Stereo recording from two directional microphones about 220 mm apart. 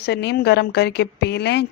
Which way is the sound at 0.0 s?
50° left (ahead or behind).